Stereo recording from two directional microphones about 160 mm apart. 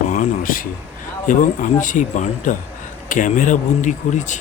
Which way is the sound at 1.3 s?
55° left (ahead or behind).